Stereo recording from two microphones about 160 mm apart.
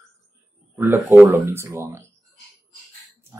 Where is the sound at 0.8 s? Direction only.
10° right (ahead or behind).